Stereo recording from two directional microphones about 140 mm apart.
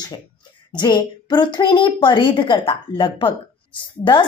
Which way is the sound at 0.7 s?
30° left (ahead or behind).